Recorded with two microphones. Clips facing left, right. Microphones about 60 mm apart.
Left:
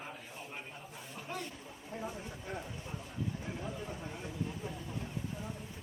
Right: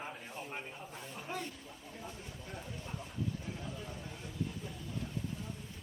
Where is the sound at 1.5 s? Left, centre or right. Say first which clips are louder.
Left 4 dB; centre.